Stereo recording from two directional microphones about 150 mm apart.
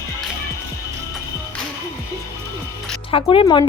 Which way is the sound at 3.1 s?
35° left (ahead or behind).